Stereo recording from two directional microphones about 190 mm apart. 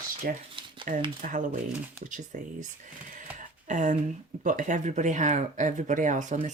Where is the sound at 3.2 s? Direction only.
40° right (ahead or behind).